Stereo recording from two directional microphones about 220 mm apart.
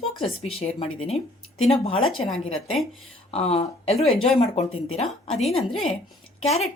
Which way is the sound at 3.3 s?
30° left (ahead or behind).